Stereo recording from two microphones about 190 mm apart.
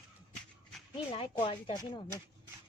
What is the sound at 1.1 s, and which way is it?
Speech, 25° left (ahead or behind).